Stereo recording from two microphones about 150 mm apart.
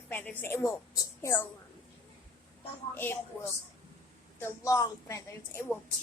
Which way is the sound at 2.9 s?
15° left (ahead or behind).